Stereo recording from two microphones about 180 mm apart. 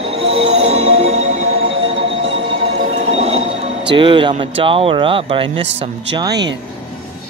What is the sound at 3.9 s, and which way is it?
Speech, 25° right (ahead or behind).